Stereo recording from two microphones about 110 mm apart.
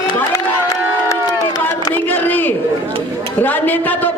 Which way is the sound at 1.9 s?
15° left (ahead or behind).